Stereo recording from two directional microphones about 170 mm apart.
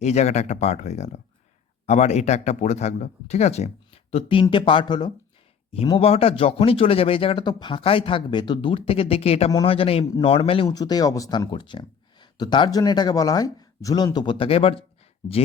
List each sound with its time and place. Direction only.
0.0 s speech: 40° left (ahead or behind)